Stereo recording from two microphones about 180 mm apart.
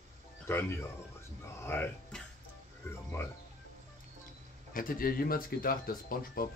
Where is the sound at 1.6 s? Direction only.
10° left (ahead or behind).